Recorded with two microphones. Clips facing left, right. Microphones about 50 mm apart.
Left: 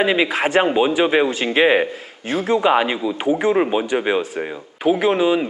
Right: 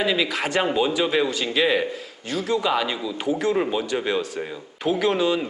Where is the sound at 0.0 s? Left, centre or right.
Left.